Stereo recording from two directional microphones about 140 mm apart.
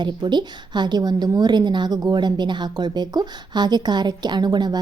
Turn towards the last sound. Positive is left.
turn(degrees=-30)  # may be behind; listen again after turning